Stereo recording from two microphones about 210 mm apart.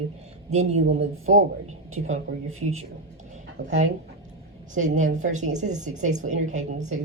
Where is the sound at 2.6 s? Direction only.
30° right (ahead or behind).